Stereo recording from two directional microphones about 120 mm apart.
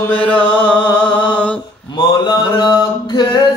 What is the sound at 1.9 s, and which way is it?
Mantra, 35° left (ahead or behind).